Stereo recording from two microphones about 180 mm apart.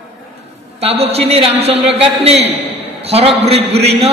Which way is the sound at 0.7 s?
35° right (ahead or behind).